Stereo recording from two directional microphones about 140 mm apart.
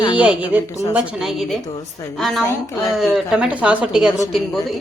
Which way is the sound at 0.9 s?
Centre (ahead or behind).